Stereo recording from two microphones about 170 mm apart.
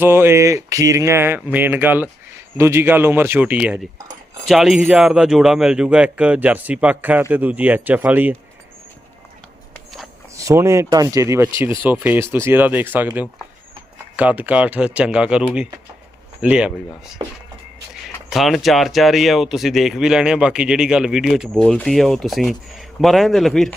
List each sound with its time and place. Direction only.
0.0 s speech: 15° right (ahead or behind)
10.3 s speech: 15° right (ahead or behind)
18.3 s speech: centre (ahead or behind)